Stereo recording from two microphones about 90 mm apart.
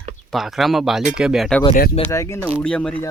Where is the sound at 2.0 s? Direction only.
35° left (ahead or behind).